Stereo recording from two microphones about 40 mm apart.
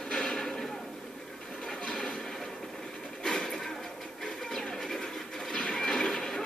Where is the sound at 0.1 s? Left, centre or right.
Centre.